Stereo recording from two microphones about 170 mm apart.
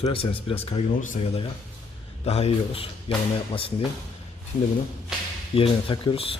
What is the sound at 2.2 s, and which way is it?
Speech, 40° left (ahead or behind).